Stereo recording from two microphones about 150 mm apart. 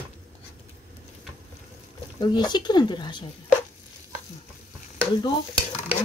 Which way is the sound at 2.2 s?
30° left (ahead or behind).